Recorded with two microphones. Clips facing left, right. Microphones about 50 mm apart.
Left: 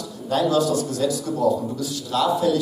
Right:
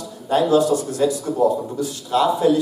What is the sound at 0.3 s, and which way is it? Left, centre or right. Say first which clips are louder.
A man's voice: right 4 dB; right.